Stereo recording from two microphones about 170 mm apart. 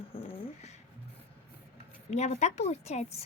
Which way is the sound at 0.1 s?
35° left (ahead or behind).